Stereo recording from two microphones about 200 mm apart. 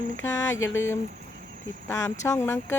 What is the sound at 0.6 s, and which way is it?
Speech, 80° left.